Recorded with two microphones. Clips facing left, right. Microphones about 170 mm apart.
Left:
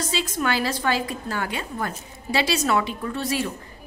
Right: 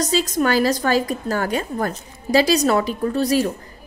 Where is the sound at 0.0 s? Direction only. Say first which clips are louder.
Right 7 dB; 40° right (ahead or behind).